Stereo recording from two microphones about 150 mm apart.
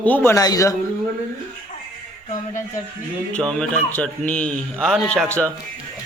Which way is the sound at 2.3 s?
55° left (ahead or behind).